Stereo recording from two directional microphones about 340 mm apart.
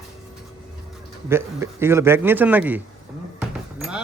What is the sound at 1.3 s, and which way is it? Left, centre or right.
A man's voice, centre.